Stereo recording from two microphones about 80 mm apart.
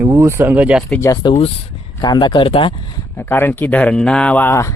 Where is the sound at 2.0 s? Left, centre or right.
Left.